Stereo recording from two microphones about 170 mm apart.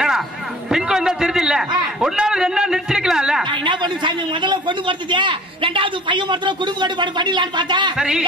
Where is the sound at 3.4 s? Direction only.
25° right (ahead or behind).